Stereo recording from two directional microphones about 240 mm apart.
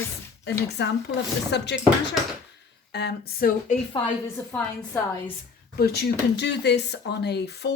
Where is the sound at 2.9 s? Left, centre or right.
Left.